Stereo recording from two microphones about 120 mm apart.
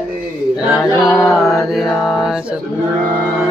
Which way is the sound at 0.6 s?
5° right (ahead or behind).